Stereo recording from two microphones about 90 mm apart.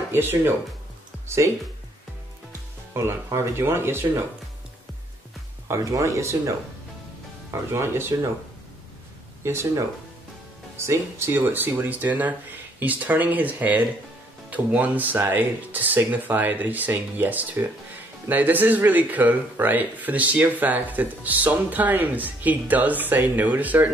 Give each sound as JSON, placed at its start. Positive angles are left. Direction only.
{"t": 0.1, "sound": "speech", "side_deg": -25}
{"t": 1.2, "sound": "music", "side_deg": -30}
{"t": 2.9, "sound": "speech", "side_deg": -30}
{"t": 5.7, "sound": "speech", "side_deg": -35}
{"t": 7.7, "sound": "speech", "side_deg": -30}
{"t": 9.4, "sound": "speech", "side_deg": -30}